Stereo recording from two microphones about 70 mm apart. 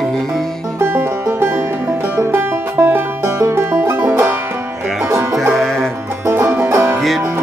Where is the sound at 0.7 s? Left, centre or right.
Right.